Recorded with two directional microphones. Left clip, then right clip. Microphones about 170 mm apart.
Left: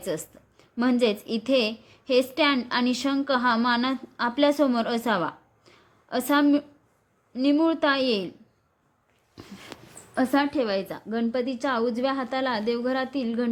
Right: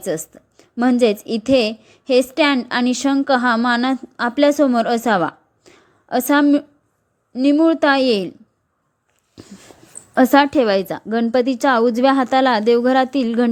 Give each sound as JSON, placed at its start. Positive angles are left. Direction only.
{"t": 0.0, "sound": "a woman's voice", "side_deg": -30}
{"t": 9.3, "sound": "a sound", "side_deg": -20}
{"t": 10.2, "sound": "a woman's voice", "side_deg": -50}